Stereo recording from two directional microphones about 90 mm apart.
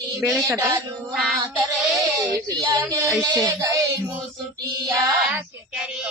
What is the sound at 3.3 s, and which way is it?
Speech, 50° right (ahead or behind).